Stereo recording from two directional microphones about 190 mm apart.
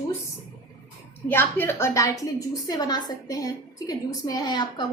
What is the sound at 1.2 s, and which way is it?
A woman's voice, 10° left (ahead or behind).